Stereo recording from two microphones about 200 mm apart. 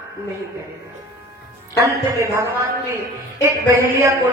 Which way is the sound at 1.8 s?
15° right (ahead or behind).